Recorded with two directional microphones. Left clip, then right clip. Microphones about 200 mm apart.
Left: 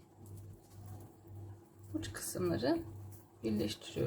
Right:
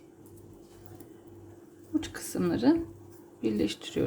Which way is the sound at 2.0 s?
35° right (ahead or behind).